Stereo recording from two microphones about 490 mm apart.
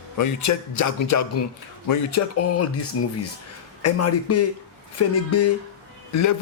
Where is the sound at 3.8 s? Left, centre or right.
Left.